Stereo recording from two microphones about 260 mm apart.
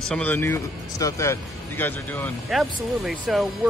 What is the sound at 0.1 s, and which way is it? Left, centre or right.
Speech, centre.